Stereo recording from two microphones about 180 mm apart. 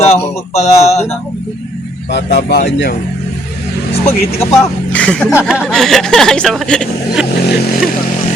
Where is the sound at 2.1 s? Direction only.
70° left (ahead or behind).